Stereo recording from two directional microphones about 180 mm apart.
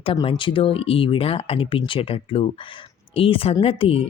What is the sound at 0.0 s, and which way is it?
Speech, 30° left (ahead or behind).